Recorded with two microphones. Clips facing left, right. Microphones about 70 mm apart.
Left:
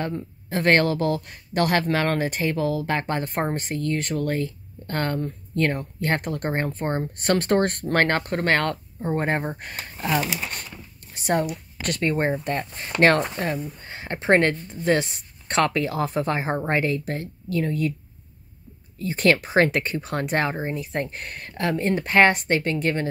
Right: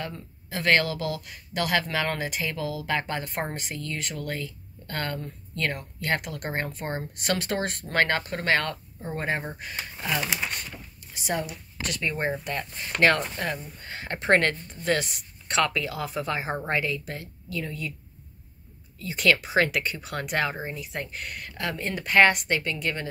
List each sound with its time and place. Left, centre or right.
0.0 s speech: left
9.1 s speech: left
9.6 s speech: left
11.1 s speech: left
12.3 s speech: left
13.8 s speech: left
18.9 s speech: left